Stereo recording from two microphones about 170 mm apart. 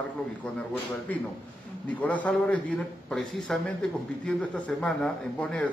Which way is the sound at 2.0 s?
10° left (ahead or behind).